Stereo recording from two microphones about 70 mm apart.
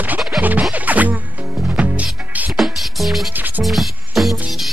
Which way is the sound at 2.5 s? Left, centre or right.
Centre.